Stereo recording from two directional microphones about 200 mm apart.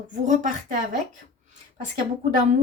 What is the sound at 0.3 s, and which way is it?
Speech, 40° right (ahead or behind).